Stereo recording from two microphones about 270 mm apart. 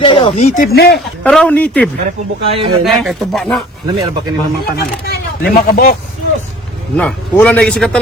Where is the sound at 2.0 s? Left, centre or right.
Right.